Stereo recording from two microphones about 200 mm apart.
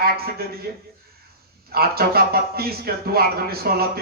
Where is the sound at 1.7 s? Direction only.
50° right (ahead or behind).